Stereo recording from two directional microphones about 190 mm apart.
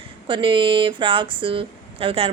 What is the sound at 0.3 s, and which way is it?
Speech, 25° right (ahead or behind).